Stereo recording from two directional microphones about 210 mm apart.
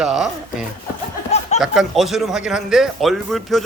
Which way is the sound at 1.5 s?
Centre (ahead or behind).